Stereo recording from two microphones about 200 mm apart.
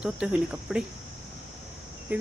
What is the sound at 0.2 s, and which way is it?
Speech, 5° right (ahead or behind).